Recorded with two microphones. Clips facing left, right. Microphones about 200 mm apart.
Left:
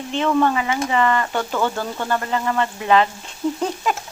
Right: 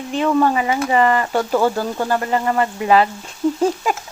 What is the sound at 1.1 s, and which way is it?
Speech, 10° right (ahead or behind).